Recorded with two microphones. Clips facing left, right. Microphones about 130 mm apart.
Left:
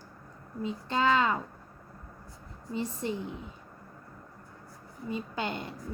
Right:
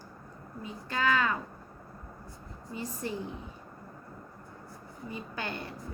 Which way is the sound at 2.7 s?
25° left (ahead or behind).